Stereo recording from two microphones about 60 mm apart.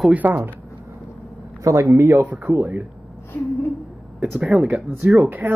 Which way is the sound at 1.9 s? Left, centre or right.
Right.